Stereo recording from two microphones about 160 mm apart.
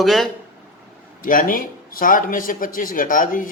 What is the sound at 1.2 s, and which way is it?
A man's voice, 60° left (ahead or behind).